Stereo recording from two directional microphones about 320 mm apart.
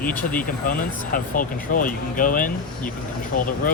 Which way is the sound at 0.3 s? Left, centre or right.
Left.